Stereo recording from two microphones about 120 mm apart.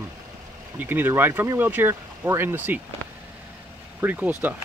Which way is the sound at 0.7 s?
15° right (ahead or behind).